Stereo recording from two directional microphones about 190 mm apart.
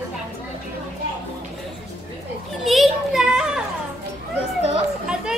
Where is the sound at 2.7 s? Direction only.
Centre (ahead or behind).